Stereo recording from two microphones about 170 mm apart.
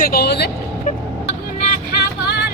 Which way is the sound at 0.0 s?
65° left (ahead or behind).